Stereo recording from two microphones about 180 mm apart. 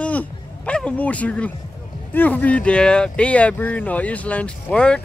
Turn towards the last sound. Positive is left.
turn(degrees=5)  # may be behind; listen again after turning